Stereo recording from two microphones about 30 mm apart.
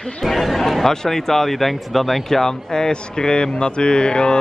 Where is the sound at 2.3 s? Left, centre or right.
Centre.